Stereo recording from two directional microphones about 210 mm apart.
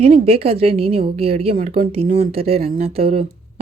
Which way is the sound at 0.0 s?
30° right (ahead or behind).